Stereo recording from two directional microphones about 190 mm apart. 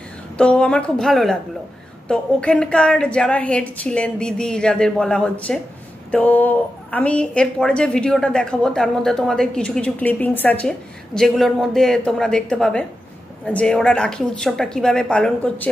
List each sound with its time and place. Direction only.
0.4 s a woman's voice: 5° left (ahead or behind)